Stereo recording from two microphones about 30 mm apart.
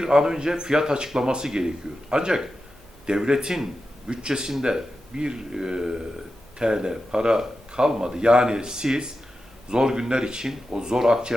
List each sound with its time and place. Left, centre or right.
0.0 s speech: right